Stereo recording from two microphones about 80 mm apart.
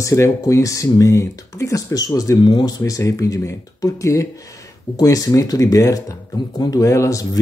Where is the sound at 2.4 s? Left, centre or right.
Left.